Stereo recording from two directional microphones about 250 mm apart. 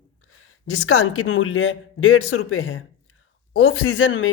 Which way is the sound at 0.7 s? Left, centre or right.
Left.